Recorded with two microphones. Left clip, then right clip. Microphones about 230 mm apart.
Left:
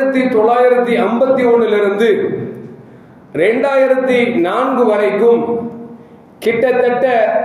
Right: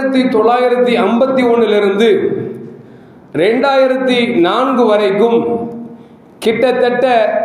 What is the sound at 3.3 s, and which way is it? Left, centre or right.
A man's voice, right.